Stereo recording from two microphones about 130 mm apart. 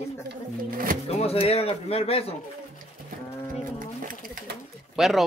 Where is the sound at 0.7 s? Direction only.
90° right.